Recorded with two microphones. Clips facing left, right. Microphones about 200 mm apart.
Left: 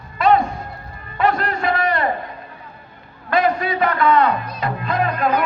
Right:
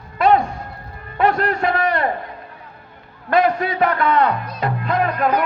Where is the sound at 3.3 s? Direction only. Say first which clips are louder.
Right 1 dB; 65° right (ahead or behind).